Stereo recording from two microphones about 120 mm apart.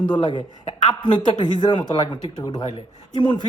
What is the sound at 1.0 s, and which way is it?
Speech, 35° left (ahead or behind).